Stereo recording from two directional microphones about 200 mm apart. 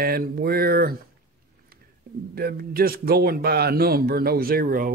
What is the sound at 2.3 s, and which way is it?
Speech, 50° right (ahead or behind).